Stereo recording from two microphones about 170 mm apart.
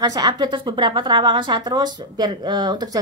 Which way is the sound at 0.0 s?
25° right (ahead or behind).